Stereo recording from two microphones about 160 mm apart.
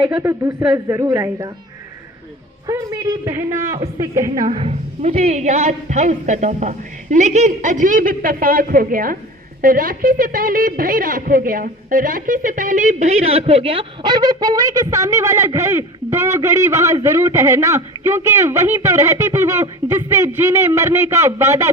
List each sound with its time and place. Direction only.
0.0 s a man's voice: 10° right (ahead or behind)
2.6 s a man's voice: 20° right (ahead or behind)
4.4 s a woman's voice: 40° right (ahead or behind); by 21.7 s 15° right (ahead or behind)